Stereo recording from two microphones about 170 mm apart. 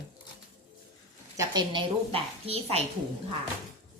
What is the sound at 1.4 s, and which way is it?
A woman's voice, 25° right (ahead or behind).